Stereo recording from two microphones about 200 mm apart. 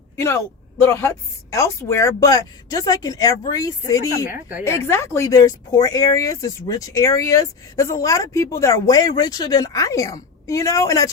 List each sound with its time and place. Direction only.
0.8 s speech: 15° left (ahead or behind)
4.3 s speech: 5° right (ahead or behind)
4.6 s speech: 15° left (ahead or behind)